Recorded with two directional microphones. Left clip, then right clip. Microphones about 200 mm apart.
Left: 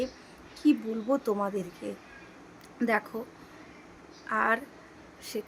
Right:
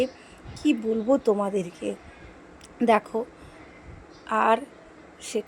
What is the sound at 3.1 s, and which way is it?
Speech, 15° right (ahead or behind).